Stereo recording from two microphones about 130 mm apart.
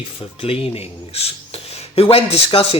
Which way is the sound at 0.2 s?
45° left (ahead or behind).